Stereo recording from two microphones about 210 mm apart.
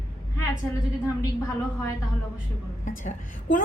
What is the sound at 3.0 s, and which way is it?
Speech, 40° left (ahead or behind).